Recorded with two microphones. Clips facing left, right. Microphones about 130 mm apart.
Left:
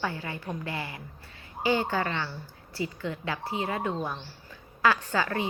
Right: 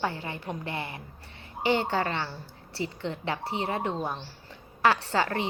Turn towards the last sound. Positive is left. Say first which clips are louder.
# right 1 dB
turn(degrees=-30)  # may be behind; listen again after turning